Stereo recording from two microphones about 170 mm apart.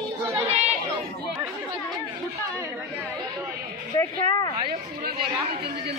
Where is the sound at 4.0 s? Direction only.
20° left (ahead or behind).